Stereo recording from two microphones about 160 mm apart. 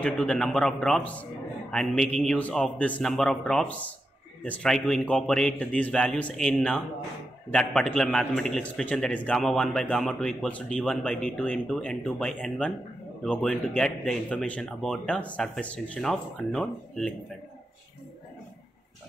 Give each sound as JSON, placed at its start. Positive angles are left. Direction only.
{"t": 0.0, "sound": "a man's voice", "side_deg": 5}